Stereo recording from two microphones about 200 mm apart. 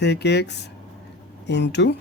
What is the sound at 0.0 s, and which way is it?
Speech, 60° left (ahead or behind).